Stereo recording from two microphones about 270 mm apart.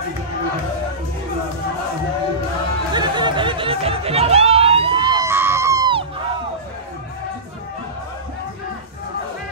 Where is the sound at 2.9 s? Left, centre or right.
Centre.